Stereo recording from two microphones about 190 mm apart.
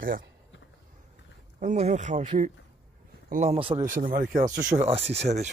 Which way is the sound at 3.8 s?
45° right (ahead or behind).